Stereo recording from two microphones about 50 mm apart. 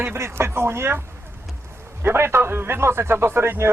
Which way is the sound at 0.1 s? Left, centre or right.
Right.